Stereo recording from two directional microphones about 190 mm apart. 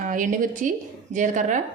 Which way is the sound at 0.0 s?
45° right (ahead or behind).